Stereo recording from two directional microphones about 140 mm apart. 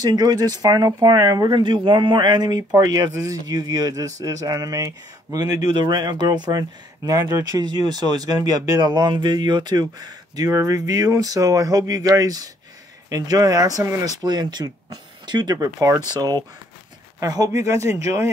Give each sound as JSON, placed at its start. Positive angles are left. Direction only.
{"t": 0.0, "sound": "speech", "side_deg": -30}